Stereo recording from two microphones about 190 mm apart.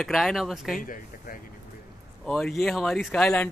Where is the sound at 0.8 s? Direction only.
45° left (ahead or behind).